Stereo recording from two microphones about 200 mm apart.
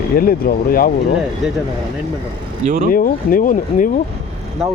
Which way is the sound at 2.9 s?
45° left (ahead or behind).